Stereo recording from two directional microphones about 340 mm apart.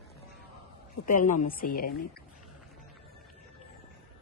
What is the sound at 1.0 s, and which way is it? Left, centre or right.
A woman's voice, left.